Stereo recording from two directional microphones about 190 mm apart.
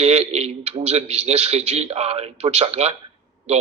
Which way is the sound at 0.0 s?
35° right (ahead or behind).